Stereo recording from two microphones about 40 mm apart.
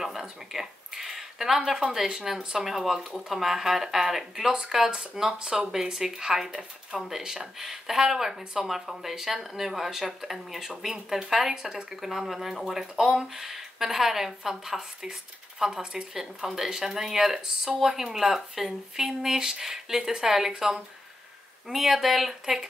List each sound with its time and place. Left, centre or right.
0.0 s a sound: centre
1.8 s speech: centre
12.0 s speech: centre